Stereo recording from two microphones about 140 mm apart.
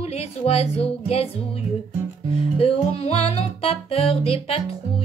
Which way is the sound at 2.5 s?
45° left (ahead or behind).